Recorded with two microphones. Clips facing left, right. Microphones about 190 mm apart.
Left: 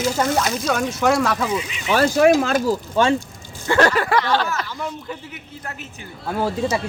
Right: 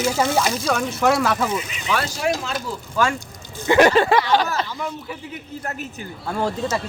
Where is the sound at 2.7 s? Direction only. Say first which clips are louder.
Left 5 dB; 25° left (ahead or behind).